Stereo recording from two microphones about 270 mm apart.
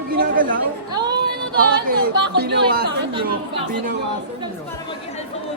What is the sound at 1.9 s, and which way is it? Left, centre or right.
Speech, right.